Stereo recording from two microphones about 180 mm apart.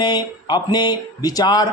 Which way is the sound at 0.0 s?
25° left (ahead or behind).